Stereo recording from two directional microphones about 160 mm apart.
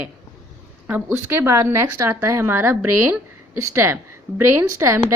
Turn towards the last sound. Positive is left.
turn(degrees=-15)  # may be behind; listen again after turning